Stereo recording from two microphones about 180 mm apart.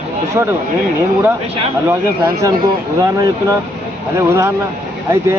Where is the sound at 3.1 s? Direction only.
20° right (ahead or behind).